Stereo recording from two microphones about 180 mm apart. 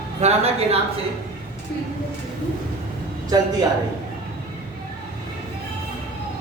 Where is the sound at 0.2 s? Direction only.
35° right (ahead or behind).